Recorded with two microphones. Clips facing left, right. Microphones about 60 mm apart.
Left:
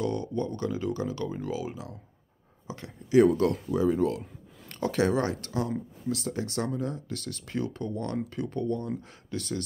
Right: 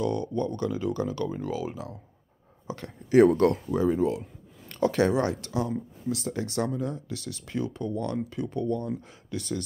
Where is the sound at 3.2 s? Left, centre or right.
Right.